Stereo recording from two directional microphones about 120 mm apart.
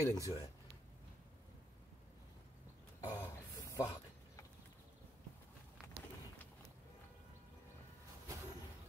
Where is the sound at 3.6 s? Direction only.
30° left (ahead or behind).